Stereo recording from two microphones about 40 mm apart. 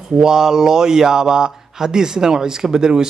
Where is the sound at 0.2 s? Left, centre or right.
Centre.